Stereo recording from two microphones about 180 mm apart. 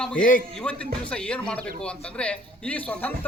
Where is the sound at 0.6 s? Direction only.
5° left (ahead or behind).